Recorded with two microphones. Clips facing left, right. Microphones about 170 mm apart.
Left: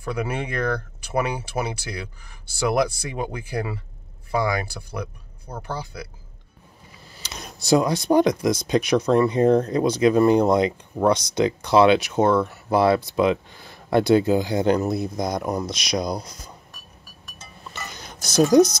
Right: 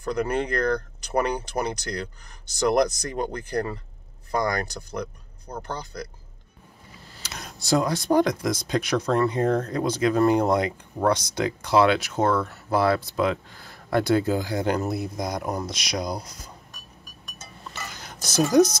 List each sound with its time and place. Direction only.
0.0 s speech: 10° left (ahead or behind)
7.2 s speech: 15° left (ahead or behind)